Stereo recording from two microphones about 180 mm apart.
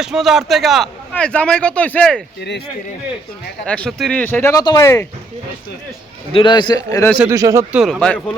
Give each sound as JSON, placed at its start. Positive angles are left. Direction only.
{"t": 0.0, "sound": "speech", "side_deg": 0}
{"t": 3.7, "sound": "speech", "side_deg": 5}
{"t": 6.3, "sound": "a man's voice", "side_deg": 25}
{"t": 7.3, "sound": "speech", "side_deg": -15}
{"t": 7.8, "sound": "speech", "side_deg": 5}